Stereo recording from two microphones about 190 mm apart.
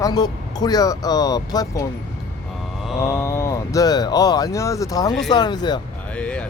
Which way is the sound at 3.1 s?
15° left (ahead or behind).